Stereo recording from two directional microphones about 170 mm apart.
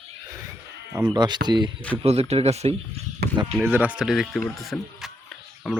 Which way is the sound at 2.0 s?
35° right (ahead or behind).